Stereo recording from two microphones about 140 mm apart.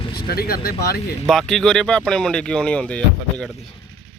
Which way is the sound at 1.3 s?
5° left (ahead or behind).